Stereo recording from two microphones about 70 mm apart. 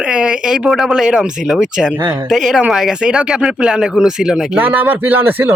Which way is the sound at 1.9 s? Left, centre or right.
Right.